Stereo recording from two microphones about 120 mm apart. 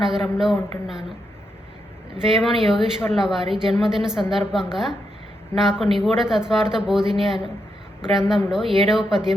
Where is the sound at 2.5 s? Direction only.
Centre (ahead or behind).